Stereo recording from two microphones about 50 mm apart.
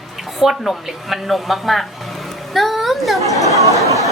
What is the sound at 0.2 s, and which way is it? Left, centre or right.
A woman's voice, centre.